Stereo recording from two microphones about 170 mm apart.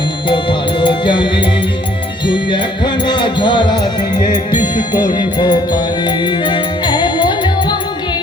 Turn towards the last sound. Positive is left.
turn(degrees=25)  # may be behind; listen again after turning